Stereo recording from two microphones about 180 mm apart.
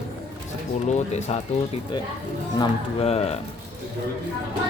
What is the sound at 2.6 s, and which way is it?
Speech, 35° left (ahead or behind).